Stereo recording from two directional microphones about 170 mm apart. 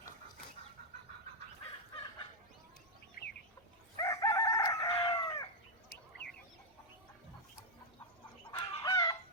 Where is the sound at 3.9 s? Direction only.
20° left (ahead or behind).